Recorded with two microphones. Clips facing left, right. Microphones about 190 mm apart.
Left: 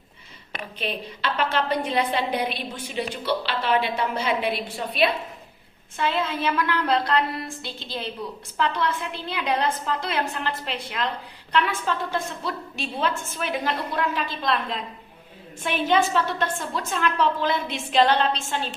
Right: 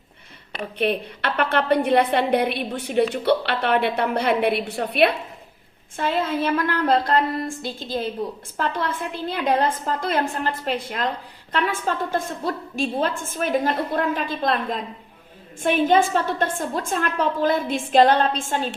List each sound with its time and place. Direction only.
0.8 s a woman's voice: 60° right (ahead or behind)
6.0 s a woman's voice: 50° right (ahead or behind)